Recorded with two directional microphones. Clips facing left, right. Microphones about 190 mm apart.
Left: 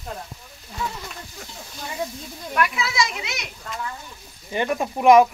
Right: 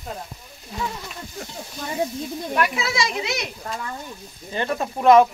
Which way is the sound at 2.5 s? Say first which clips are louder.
Even; 30° right (ahead or behind).